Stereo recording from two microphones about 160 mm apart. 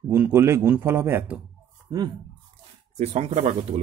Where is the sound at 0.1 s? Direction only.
15° right (ahead or behind).